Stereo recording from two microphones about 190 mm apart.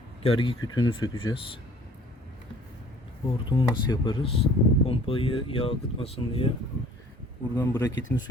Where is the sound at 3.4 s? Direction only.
25° left (ahead or behind).